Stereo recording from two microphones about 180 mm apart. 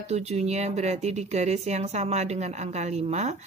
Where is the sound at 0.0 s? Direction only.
35° right (ahead or behind).